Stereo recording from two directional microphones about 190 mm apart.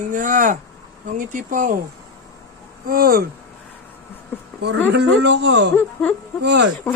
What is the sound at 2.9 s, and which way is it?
Speech, 50° right (ahead or behind).